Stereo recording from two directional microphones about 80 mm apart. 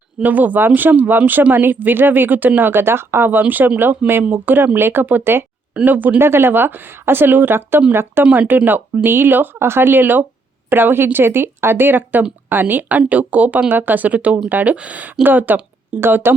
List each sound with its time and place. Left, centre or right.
0.2 s speech: right